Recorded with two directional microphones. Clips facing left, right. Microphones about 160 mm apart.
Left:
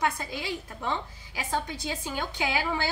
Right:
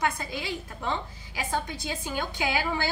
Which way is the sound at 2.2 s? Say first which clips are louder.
Right 1 dB; 25° left (ahead or behind).